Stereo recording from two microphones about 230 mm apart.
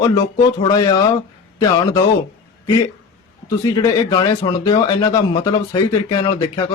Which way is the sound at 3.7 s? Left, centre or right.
Centre.